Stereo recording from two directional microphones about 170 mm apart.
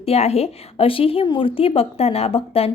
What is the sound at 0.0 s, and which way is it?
A woman's voice, 35° left (ahead or behind).